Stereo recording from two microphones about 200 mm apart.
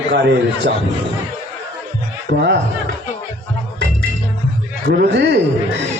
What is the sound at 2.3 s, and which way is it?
Speech, 60° right (ahead or behind).